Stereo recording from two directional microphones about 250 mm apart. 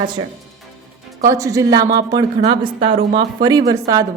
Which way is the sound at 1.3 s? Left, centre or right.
Centre.